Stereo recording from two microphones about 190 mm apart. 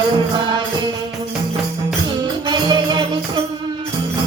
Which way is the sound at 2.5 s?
25° right (ahead or behind).